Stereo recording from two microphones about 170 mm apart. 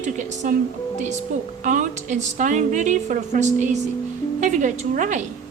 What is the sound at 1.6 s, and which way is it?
A woman's voice, 50° right (ahead or behind).